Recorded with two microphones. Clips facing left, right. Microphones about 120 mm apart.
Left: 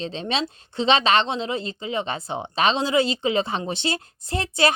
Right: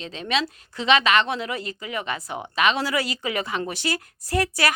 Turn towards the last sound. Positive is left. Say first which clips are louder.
# left 1 dB
turn(degrees=25)  # may be behind; listen again after turning